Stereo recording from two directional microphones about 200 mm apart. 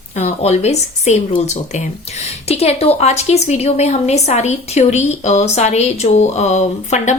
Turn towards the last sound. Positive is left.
turn(degrees=35)  # may be behind; listen again after turning